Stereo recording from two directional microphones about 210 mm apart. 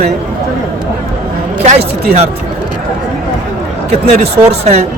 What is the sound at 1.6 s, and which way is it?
Speech, 30° right (ahead or behind).